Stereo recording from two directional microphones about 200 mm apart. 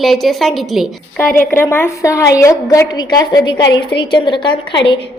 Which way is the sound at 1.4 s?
10° left (ahead or behind).